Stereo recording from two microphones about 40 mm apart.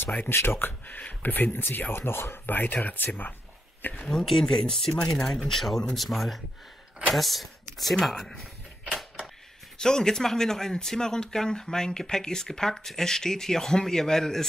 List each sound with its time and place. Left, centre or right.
0.3 s speech: left
2.6 s speech: left
3.9 s speech: centre
9.8 s speech: centre